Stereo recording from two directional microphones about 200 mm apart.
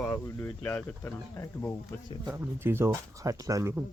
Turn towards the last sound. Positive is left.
turn(degrees=-15)  # may be behind; listen again after turning